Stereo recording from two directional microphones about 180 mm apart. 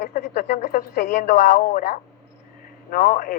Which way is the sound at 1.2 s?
40° left (ahead or behind).